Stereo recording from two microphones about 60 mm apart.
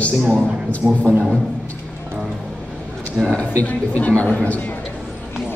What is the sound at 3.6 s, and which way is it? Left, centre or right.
A man's voice, left.